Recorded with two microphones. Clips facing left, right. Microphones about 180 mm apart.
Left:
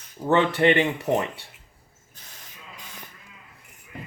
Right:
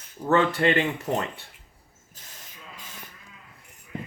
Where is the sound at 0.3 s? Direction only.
20° left (ahead or behind).